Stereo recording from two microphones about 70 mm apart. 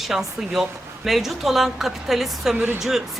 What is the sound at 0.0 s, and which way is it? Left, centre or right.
A woman's voice, centre.